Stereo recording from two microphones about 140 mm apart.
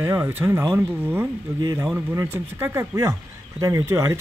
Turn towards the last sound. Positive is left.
turn(degrees=-20)  # may be behind; listen again after turning